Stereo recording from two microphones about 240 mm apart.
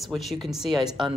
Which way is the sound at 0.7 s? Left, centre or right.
Centre.